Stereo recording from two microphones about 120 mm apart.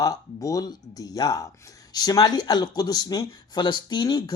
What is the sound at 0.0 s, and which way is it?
Speech, 30° left (ahead or behind).